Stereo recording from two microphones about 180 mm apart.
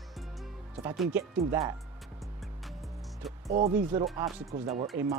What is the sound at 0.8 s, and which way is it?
Speech, 20° right (ahead or behind).